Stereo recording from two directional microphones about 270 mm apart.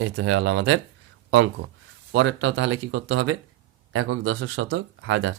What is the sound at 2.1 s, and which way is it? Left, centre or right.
Speech, right.